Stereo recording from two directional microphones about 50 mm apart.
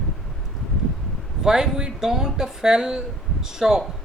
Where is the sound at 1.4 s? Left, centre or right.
Centre.